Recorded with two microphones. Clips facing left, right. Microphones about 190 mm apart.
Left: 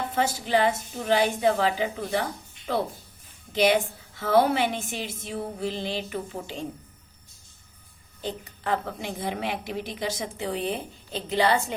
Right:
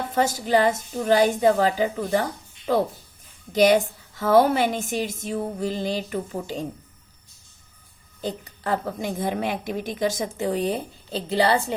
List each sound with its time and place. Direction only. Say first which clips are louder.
0.1 s music: right 5 dB; 40° right (ahead or behind)
3.5 s music: right 4 dB; 40° right (ahead or behind)
8.2 s a woman's voice: right 3 dB; 40° right (ahead or behind)